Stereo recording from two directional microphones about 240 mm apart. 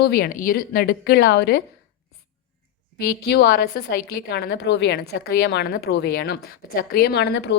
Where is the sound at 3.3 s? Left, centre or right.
Left.